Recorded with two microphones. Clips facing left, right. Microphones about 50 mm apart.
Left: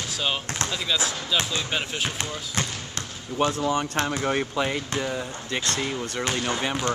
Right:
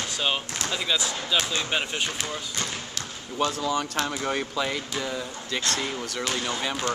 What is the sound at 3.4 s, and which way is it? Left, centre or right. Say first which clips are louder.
Speech: left 2 dB; left.